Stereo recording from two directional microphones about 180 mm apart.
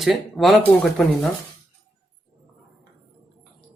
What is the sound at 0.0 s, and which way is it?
Speech, centre (ahead or behind).